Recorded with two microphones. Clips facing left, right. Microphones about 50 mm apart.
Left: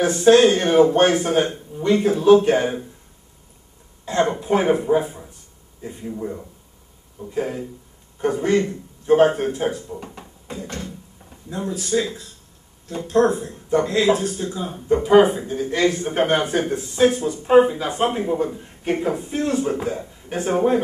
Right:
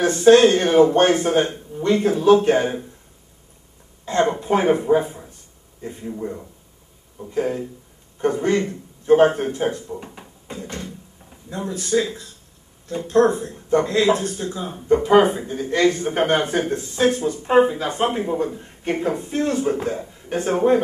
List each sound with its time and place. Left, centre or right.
0.0 s speech: centre
4.0 s speech: centre